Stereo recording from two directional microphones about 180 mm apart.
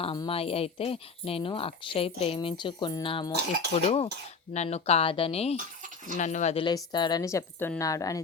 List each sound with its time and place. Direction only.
0.0 s a woman's voice: 30° left (ahead or behind)